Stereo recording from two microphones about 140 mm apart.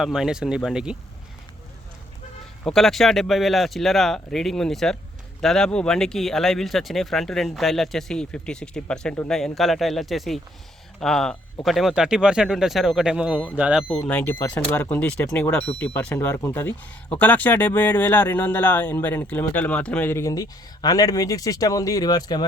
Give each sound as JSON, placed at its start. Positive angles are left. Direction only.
{"t": 0.0, "sound": "speech", "side_deg": -5}
{"t": 2.6, "sound": "speech", "side_deg": 0}
{"t": 14.0, "sound": "speech", "side_deg": 15}